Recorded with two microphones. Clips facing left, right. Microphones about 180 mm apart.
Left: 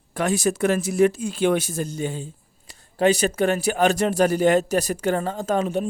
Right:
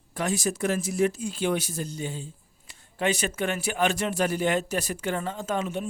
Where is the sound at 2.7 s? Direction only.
35° left (ahead or behind).